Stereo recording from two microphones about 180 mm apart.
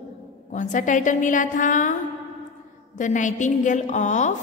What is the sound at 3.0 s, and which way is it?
A woman's voice, 45° left (ahead or behind).